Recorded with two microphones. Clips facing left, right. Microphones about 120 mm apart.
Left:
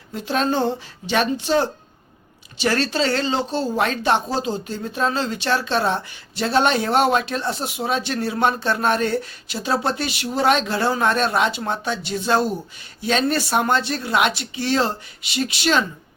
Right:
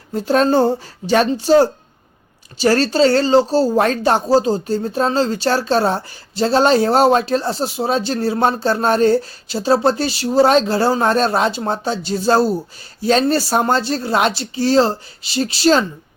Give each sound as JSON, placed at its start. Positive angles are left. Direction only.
{"t": 0.1, "sound": "speech", "side_deg": -40}